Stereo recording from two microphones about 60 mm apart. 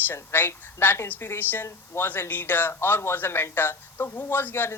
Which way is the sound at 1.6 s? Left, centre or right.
Left.